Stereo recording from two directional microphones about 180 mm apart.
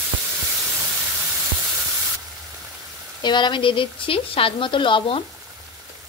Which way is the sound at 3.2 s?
25° left (ahead or behind).